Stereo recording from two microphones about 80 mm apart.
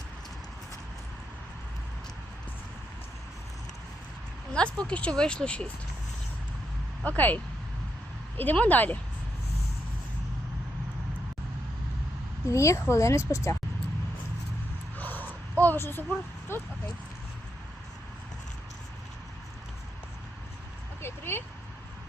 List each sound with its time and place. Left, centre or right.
4.5 s speech: centre
7.0 s speech: centre
12.5 s speech: left
14.9 s a sound: left
15.6 s speech: left
21.0 s vehicle: left